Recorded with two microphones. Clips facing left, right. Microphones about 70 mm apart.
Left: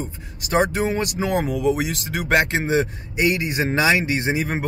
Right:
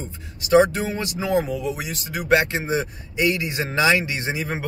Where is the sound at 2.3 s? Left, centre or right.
Left.